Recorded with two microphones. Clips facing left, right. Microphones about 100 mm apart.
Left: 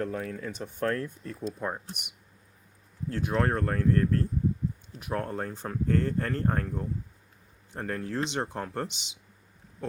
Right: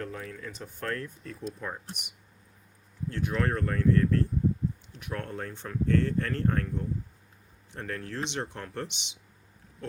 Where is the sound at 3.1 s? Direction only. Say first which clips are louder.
Left 2 dB; 30° left (ahead or behind).